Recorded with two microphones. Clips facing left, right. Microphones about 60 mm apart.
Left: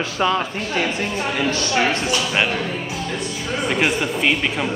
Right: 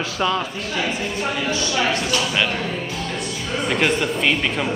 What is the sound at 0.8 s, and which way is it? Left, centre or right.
A woman's voice, left.